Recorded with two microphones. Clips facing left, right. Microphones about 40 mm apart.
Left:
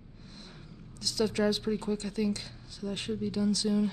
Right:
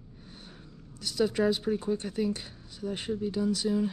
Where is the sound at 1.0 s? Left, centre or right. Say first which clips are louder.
Right 2 dB; right.